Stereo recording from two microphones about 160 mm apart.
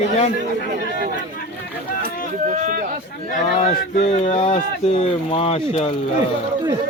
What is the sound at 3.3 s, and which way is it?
A man's voice, 45° left (ahead or behind).